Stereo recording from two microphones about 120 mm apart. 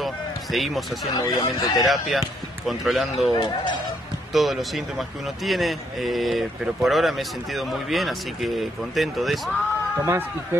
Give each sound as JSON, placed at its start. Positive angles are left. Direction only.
{"t": 0.0, "sound": "run", "side_deg": 0}
{"t": 1.1, "sound": "speech", "side_deg": 30}
{"t": 1.9, "sound": "speech", "side_deg": 0}
{"t": 4.3, "sound": "speech", "side_deg": 0}
{"t": 9.9, "sound": "a man's voice", "side_deg": -20}